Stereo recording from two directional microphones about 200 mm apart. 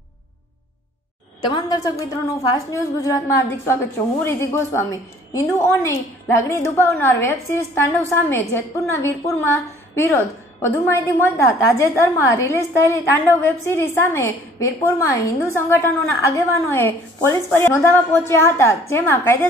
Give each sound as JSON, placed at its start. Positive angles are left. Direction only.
{"t": 1.4, "sound": "a woman's voice", "side_deg": 25}